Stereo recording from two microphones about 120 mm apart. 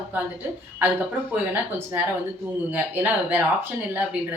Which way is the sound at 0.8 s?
15° right (ahead or behind).